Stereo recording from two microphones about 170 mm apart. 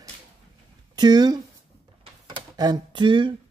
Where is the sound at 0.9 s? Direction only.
25° right (ahead or behind).